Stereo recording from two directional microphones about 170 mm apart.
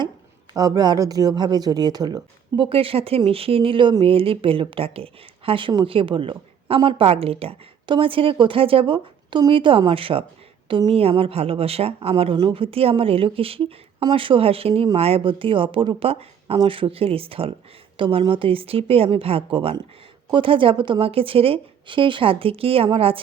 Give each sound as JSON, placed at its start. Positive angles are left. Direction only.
{"t": 0.5, "sound": "speech", "side_deg": -20}